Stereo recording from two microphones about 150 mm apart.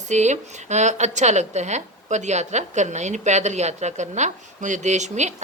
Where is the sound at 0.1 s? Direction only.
50° right (ahead or behind).